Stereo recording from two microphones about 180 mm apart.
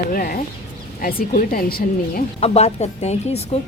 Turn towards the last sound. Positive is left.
turn(degrees=35)  # may be behind; listen again after turning